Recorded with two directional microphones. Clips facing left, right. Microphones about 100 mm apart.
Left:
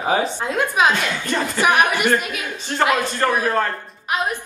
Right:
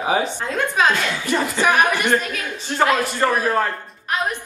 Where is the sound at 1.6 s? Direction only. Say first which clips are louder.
Left 1 dB; 15° left (ahead or behind).